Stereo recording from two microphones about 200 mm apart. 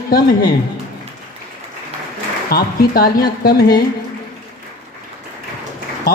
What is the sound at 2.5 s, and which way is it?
Speech, 45° left (ahead or behind).